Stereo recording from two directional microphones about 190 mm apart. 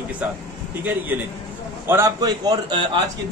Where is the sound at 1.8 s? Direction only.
15° right (ahead or behind).